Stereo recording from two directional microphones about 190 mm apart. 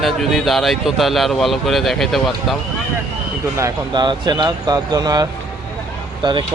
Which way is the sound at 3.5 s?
20° right (ahead or behind).